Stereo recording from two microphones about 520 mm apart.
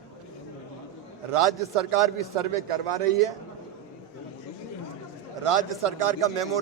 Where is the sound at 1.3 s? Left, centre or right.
Right.